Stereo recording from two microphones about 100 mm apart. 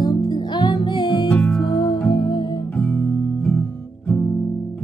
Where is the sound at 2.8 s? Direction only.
10° left (ahead or behind).